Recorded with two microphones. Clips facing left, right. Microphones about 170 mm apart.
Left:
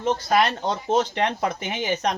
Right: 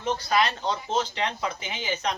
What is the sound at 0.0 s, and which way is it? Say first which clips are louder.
A woman's voice: left 4 dB; 50° left (ahead or behind).